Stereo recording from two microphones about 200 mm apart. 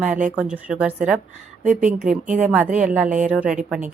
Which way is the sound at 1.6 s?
40° right (ahead or behind).